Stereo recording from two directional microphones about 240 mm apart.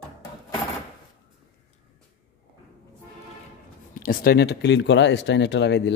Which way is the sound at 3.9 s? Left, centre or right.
Left.